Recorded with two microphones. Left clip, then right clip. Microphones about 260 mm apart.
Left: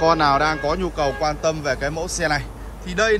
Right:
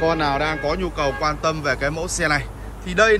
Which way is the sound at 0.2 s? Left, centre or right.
Centre.